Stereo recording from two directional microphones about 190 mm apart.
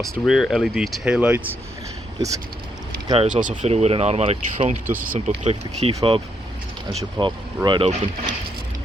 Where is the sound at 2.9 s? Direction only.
25° right (ahead or behind).